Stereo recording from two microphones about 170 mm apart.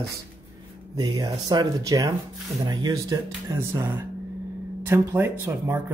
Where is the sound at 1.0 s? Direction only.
25° right (ahead or behind).